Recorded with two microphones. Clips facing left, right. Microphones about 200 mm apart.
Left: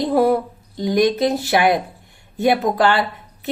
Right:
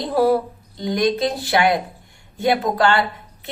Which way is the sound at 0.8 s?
20° left (ahead or behind).